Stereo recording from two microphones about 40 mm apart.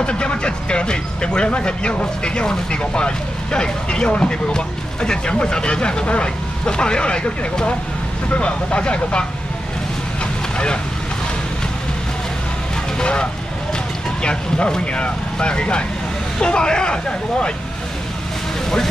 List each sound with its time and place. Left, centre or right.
0.0 s speech: left
13.0 s speech: left